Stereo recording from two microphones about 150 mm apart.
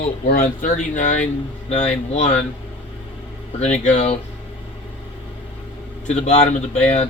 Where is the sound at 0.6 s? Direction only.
55° left (ahead or behind).